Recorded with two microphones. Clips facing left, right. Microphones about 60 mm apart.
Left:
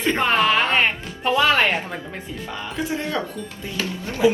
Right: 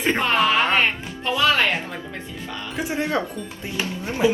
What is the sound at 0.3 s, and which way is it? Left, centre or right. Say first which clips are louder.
Music: right 1 dB; centre.